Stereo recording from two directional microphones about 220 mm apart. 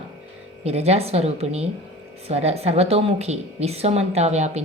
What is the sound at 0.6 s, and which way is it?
A woman's voice, 30° right (ahead or behind).